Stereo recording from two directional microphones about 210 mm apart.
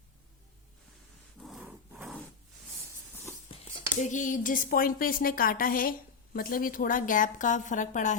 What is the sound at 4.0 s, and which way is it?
A woman's voice, 35° left (ahead or behind).